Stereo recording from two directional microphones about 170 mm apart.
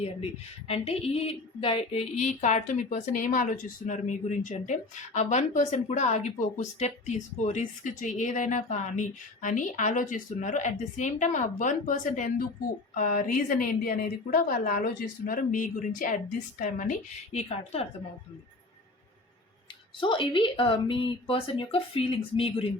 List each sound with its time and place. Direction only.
0.7 s speech: 35° left (ahead or behind)
17.3 s speech: 40° left (ahead or behind)
20.0 s speech: 30° left (ahead or behind)